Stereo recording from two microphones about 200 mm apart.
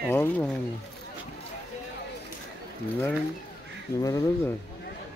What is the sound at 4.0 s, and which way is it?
Speech, 15° left (ahead or behind).